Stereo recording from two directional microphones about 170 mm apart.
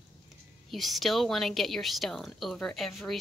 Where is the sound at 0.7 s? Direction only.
Centre (ahead or behind).